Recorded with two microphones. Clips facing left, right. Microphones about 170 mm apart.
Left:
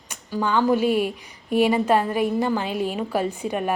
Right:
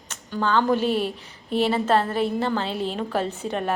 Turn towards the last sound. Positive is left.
turn(degrees=10)  # may be behind; listen again after turning